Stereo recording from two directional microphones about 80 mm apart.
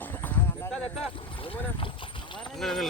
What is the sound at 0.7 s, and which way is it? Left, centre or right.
Vehicle, centre.